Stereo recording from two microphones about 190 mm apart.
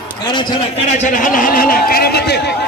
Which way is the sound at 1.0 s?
45° left (ahead or behind).